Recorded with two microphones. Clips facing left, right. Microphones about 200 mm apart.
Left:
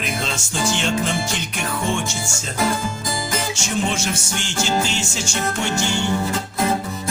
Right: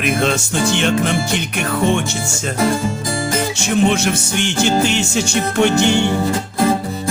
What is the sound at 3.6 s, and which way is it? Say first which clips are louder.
Music: right 9 dB; 60° right (ahead or behind).